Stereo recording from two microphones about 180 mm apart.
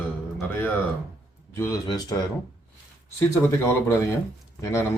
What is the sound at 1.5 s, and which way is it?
Speech, 15° left (ahead or behind).